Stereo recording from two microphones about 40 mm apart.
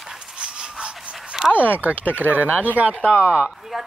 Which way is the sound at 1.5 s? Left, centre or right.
Right.